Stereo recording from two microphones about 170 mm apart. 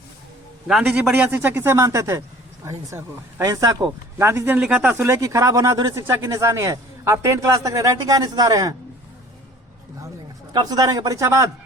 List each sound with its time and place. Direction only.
0.7 s speech: 5° right (ahead or behind); by 8.7 s 20° right (ahead or behind)
10.5 s a man's voice: 25° right (ahead or behind)